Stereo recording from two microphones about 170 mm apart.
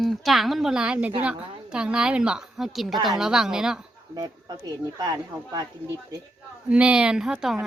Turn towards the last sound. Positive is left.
turn(degrees=-5)  # may be behind; listen again after turning